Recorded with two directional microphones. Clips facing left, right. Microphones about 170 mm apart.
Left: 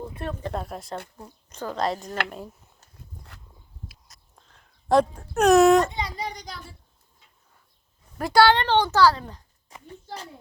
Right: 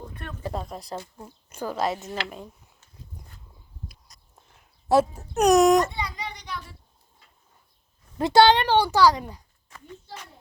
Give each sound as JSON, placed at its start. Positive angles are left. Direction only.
{"t": 0.1, "sound": "a woman's voice", "side_deg": 30}
{"t": 0.6, "sound": "a woman's voice", "side_deg": 5}
{"t": 1.5, "sound": "a woman's voice", "side_deg": -10}
{"t": 4.4, "sound": "speech", "side_deg": -10}
{"t": 6.1, "sound": "a child's voice", "side_deg": 40}
{"t": 8.2, "sound": "a child's voice", "side_deg": -20}